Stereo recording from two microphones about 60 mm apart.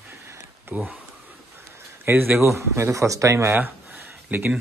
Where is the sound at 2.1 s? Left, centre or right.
Right.